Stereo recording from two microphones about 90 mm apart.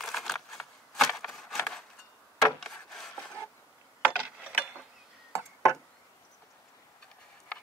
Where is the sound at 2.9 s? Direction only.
5° left (ahead or behind).